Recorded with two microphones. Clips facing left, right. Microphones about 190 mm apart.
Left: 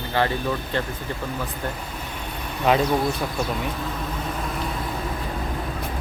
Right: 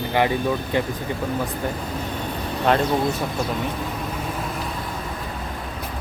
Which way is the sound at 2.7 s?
5° left (ahead or behind).